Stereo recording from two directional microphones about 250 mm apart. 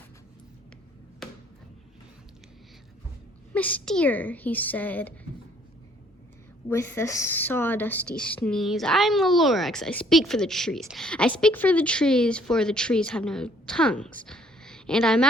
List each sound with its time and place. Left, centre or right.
1.2 s a sound: centre
3.5 s a woman's voice: centre
6.7 s a woman's voice: centre